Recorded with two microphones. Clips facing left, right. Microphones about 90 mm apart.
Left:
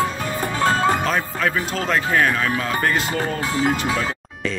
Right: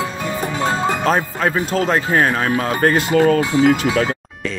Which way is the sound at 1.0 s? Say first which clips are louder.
Right 4 dB; 35° right (ahead or behind).